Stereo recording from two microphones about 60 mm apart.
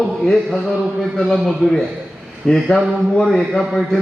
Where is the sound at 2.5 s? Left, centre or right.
Centre.